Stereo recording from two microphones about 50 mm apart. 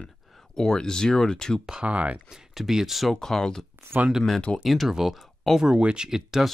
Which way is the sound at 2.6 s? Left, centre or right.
Centre.